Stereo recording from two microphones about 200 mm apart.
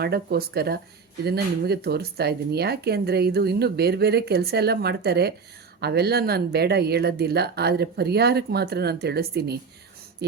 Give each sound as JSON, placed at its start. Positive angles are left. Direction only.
{"t": 0.0, "sound": "speech", "side_deg": -50}